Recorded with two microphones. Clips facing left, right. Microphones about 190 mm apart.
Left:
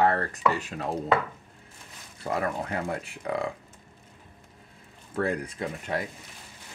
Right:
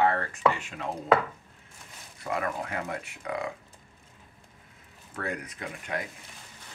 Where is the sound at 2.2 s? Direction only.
35° left (ahead or behind).